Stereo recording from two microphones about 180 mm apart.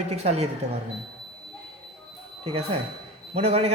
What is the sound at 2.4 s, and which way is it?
Speech, 35° right (ahead or behind).